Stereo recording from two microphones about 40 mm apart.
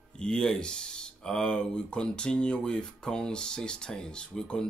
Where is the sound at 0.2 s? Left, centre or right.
Centre.